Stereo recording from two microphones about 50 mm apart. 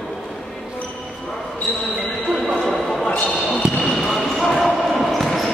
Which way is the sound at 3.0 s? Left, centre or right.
Centre.